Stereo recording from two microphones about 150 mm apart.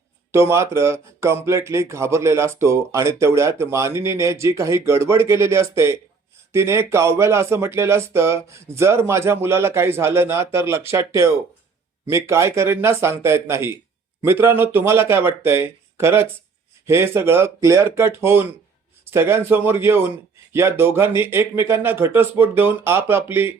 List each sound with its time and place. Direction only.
0.3 s speech: 20° right (ahead or behind)